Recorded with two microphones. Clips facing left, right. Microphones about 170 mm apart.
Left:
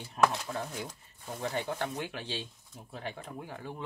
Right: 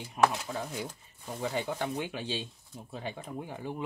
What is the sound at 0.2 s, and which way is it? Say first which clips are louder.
Speech: right 1 dB; 15° right (ahead or behind).